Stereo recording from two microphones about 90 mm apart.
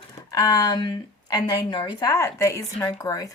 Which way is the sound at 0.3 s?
50° left (ahead or behind).